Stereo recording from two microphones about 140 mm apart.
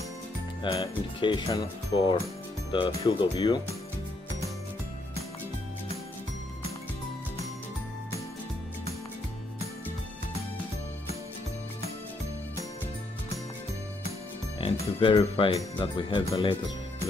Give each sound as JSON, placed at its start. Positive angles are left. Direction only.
{"t": 0.7, "sound": "speech", "side_deg": 40}
{"t": 14.6, "sound": "speech", "side_deg": 40}